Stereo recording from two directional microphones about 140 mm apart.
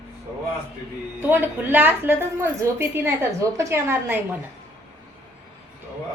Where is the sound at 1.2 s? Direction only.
15° right (ahead or behind).